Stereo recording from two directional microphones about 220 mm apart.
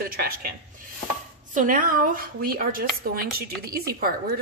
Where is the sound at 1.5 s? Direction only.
35° right (ahead or behind).